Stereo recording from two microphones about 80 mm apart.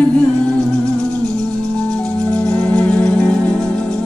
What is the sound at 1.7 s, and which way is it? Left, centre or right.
Music, centre.